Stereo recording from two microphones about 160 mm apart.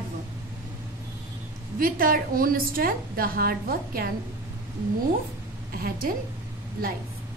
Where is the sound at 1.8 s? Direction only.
65° right (ahead or behind).